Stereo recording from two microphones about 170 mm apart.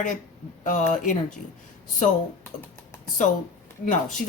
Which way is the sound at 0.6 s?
50° left (ahead or behind).